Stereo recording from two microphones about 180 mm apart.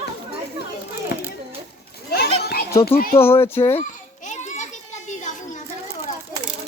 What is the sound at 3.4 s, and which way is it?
Speech, 15° left (ahead or behind).